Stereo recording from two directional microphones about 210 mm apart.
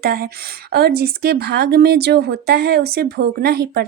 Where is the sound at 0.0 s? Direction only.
45° right (ahead or behind).